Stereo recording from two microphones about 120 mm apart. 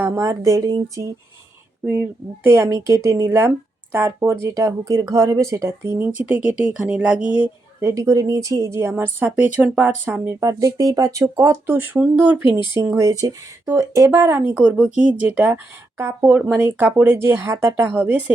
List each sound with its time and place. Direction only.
0.0 s speech: 25° right (ahead or behind)
7.8 s speech: 25° right (ahead or behind)
10.6 s speech: 30° right (ahead or behind); by 18.3 s 15° right (ahead or behind)